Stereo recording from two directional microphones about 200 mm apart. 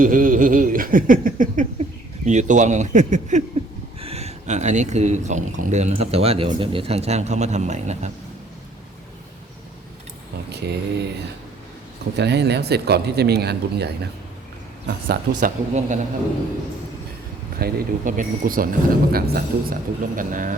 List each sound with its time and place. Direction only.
0.0 s speech: 45° right (ahead or behind)
10.5 s a sound: 55° right (ahead or behind)
12.1 s speech: 55° right (ahead or behind); by 16.0 s 40° right (ahead or behind)
17.6 s a man's voice: 45° right (ahead or behind)